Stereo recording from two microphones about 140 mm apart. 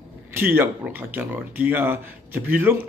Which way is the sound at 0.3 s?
15° right (ahead or behind).